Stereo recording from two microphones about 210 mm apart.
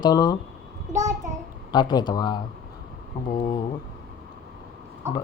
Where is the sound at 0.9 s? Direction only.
15° right (ahead or behind).